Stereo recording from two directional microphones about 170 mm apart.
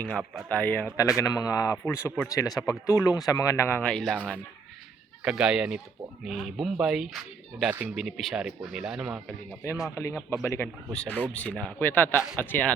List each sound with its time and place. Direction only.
0.0 s speech: 5° left (ahead or behind)
5.2 s speech: 5° right (ahead or behind)
9.9 s speech: 15° left (ahead or behind)
10.9 s speech: 5° left (ahead or behind)